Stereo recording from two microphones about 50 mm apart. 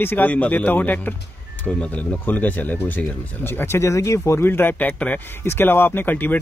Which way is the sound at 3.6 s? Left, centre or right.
Left.